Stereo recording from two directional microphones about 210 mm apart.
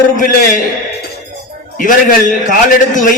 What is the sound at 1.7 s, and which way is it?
A man's voice, 40° left (ahead or behind).